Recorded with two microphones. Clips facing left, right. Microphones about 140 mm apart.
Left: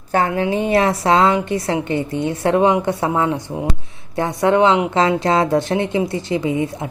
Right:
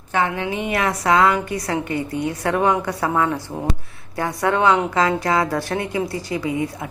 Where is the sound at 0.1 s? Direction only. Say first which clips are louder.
Left 4 dB; 35° left (ahead or behind).